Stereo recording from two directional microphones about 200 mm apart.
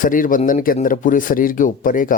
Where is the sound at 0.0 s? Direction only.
45° left (ahead or behind).